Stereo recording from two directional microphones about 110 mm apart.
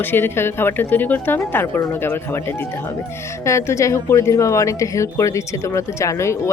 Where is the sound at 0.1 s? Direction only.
20° left (ahead or behind).